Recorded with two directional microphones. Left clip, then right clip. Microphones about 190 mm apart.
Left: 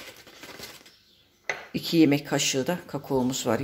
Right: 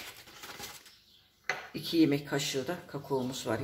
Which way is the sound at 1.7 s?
40° left (ahead or behind).